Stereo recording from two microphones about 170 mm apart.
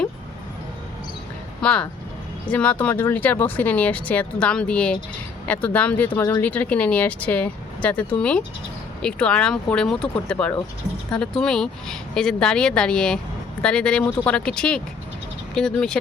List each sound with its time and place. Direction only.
1.6 s speech: 5° left (ahead or behind)